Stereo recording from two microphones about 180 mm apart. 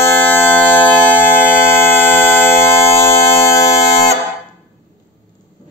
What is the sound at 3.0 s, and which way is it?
Mains hum, 15° left (ahead or behind).